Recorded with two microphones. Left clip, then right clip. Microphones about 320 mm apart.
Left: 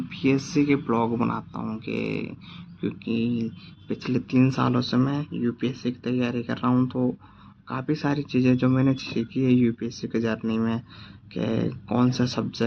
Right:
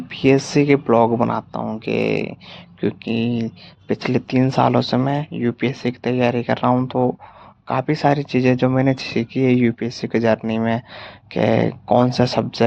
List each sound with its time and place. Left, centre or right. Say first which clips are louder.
0.1 s speech: right 9 dB; centre